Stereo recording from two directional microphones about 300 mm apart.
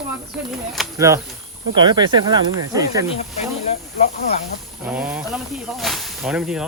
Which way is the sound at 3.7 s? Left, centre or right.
Centre.